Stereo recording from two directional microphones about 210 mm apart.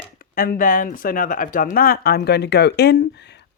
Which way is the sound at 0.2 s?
45° left (ahead or behind).